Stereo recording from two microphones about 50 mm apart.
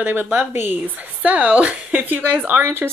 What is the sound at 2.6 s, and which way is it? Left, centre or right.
Speech, right.